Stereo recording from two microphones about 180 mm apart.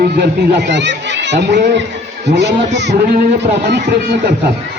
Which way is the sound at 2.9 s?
40° right (ahead or behind).